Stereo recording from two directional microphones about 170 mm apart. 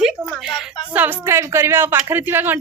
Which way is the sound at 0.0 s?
Centre (ahead or behind).